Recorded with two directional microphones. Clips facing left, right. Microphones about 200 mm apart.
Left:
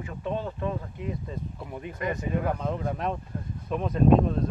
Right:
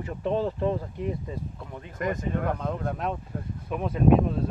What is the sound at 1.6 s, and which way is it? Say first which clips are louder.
Speech: left 3 dB; 15° left (ahead or behind).